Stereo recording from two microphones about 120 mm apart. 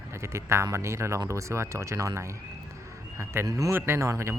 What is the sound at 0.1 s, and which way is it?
A man's voice, 20° right (ahead or behind).